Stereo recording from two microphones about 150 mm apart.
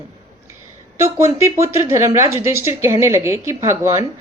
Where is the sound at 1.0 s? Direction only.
20° right (ahead or behind).